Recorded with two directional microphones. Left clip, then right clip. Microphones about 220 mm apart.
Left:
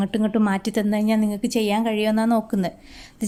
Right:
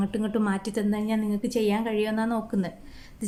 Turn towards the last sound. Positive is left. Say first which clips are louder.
# left 7 dB
turn(degrees=40)  # may be behind; listen again after turning